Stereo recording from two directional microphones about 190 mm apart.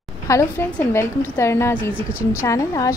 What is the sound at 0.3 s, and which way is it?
A woman's voice, 15° left (ahead or behind).